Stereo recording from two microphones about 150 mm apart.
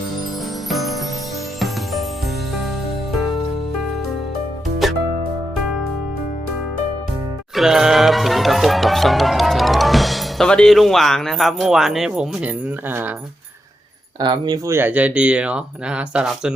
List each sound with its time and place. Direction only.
0.7 s music: centre (ahead or behind)
4.8 s music: centre (ahead or behind)
7.5 s music: centre (ahead or behind)
14.2 s speech: 30° right (ahead or behind)
14.7 s speech: 15° right (ahead or behind)